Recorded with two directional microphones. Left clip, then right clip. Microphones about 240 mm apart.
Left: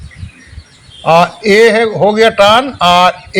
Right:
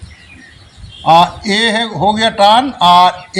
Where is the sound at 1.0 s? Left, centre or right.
Left.